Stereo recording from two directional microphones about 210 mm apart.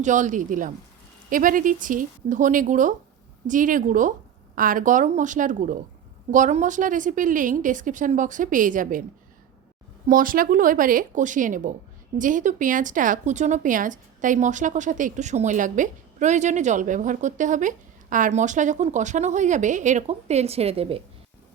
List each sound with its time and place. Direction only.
0.0 s speech: 35° right (ahead or behind)
10.1 s speech: 40° right (ahead or behind)